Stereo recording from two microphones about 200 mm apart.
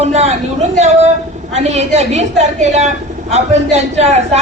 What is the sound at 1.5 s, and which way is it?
A woman's voice, 35° right (ahead or behind).